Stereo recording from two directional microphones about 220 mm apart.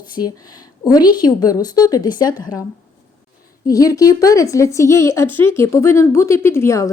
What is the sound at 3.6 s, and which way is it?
A woman's voice, 15° left (ahead or behind).